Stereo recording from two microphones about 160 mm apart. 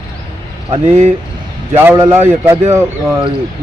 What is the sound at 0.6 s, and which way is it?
Speech, 40° right (ahead or behind).